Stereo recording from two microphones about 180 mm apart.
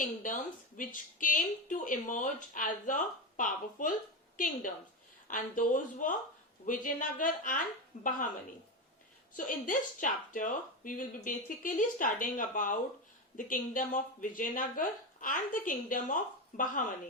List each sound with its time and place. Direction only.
0.0 s speech: 45° left (ahead or behind)
9.3 s speech: 50° left (ahead or behind)